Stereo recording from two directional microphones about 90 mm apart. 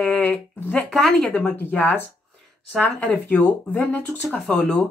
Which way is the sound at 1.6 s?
20° left (ahead or behind).